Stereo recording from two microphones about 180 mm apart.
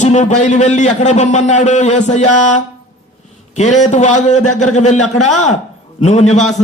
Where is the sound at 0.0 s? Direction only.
40° left (ahead or behind).